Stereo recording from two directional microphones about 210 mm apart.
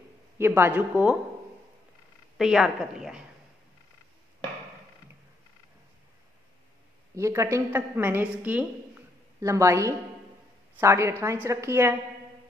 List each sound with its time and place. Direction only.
0.4 s speech: 10° right (ahead or behind)
2.3 s a woman's voice: centre (ahead or behind)
7.2 s a woman's voice: 15° right (ahead or behind)